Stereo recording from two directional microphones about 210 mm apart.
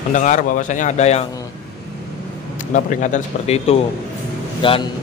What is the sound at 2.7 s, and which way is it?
A man's voice, 35° left (ahead or behind).